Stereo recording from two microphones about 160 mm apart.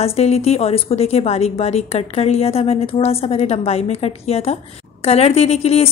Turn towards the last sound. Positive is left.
turn(degrees=40)  # may be behind; listen again after turning